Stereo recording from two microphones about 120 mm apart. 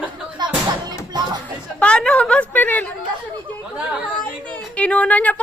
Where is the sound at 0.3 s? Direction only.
35° right (ahead or behind).